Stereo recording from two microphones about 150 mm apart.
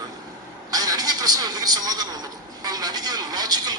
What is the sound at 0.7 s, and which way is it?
A man's voice, 25° right (ahead or behind).